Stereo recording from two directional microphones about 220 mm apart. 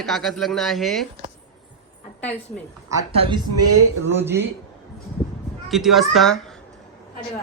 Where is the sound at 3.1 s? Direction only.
25° right (ahead or behind).